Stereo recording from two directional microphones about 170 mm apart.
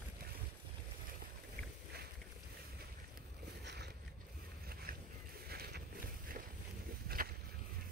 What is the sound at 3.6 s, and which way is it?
Boat, 80° right.